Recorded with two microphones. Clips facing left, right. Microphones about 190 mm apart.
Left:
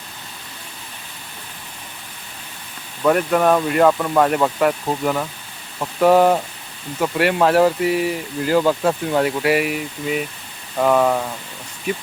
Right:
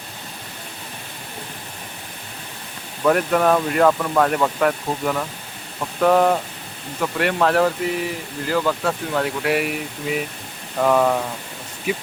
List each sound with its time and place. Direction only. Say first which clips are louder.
3.0 s speech: left 1 dB; centre (ahead or behind)
8.5 s speech: left 4 dB; 20° left (ahead or behind)
9.4 s speech: left 3 dB; 5° left (ahead or behind)